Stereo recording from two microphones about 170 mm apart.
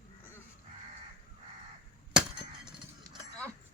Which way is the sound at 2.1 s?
5° right (ahead or behind).